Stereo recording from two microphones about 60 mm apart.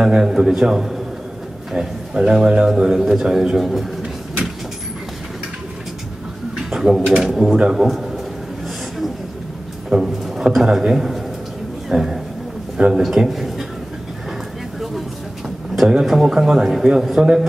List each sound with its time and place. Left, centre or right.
0.0 s a man's voice: centre
6.5 s a man's voice: centre
7.8 s a man's voice: centre
9.8 s a man's voice: centre
15.9 s a man's voice: centre